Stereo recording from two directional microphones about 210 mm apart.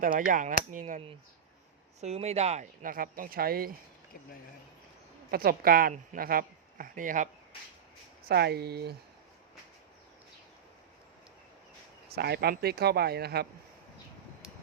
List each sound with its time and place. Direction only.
0.0 s speech: 40° right (ahead or behind)
5.3 s speech: 45° right (ahead or behind)
8.3 s speech: 50° right (ahead or behind)
12.0 s speech: 50° right (ahead or behind)